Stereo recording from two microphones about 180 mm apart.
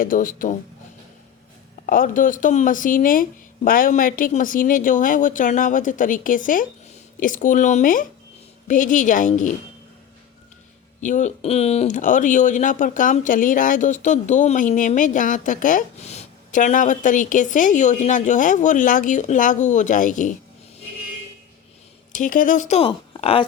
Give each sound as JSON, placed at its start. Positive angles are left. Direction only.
{"t": 0.0, "sound": "speech", "side_deg": 50}
{"t": 1.9, "sound": "speech", "side_deg": 50}
{"t": 11.0, "sound": "speech", "side_deg": 40}
{"t": 22.1, "sound": "speech", "side_deg": 45}